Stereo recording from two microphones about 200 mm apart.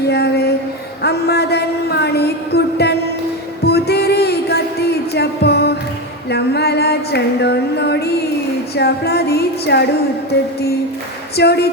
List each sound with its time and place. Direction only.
0.1 s music: 55° left (ahead or behind)
1.0 s a sound: 55° left (ahead or behind)
3.6 s music: 55° left (ahead or behind)
11.3 s speech: 55° left (ahead or behind)